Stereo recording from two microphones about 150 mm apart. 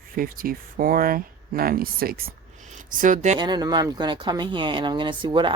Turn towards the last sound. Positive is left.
turn(degrees=-35)  # may be behind; listen again after turning